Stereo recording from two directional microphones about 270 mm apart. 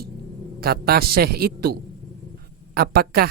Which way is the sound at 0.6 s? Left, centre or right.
Right.